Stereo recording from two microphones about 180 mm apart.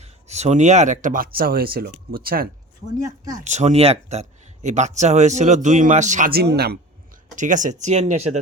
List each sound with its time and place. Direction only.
0.0 s speech: 40° right (ahead or behind); by 2.5 s 55° right (ahead or behind)
3.3 s speech: 40° right (ahead or behind); by 6.7 s 60° right (ahead or behind)
7.3 s speech: 45° right (ahead or behind)